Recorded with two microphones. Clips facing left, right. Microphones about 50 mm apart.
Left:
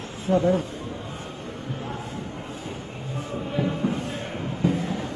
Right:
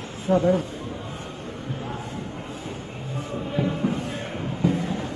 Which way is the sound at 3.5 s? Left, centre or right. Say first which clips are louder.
Right 1 dB; centre.